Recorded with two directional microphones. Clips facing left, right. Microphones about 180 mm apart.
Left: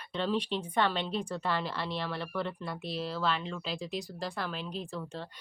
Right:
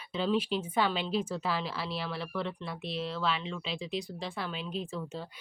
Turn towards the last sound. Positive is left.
turn(degrees=-5)  # may be behind; listen again after turning